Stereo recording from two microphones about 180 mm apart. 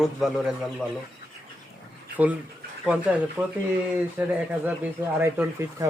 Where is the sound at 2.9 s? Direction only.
5° right (ahead or behind).